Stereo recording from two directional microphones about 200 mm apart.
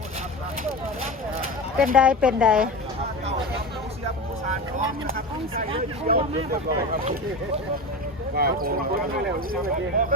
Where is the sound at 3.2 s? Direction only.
30° right (ahead or behind).